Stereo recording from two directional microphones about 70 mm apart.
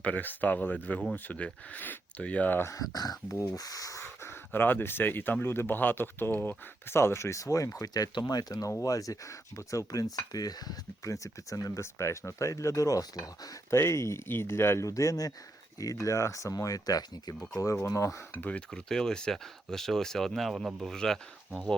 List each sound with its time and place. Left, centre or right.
0.0 s speech: left
2.6 s speech: left
4.0 s speech: left
8.8 s speech: left
11.0 s speech: left
13.7 s speech: left
14.8 s speech: left
17.8 s speech: left
18.3 s speech: left
18.7 s speech: centre